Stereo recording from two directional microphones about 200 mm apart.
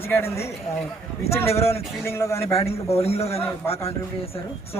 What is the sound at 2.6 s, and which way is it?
Speech, 30° left (ahead or behind).